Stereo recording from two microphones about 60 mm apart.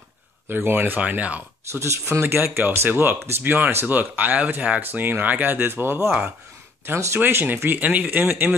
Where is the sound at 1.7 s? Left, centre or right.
Right.